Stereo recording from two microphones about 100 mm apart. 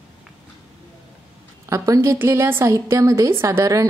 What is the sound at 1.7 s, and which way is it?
A woman's voice, 30° right (ahead or behind).